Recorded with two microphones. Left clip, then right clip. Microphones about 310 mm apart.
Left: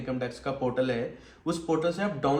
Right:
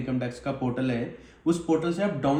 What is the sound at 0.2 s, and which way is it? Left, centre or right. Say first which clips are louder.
A man's voice: even; centre.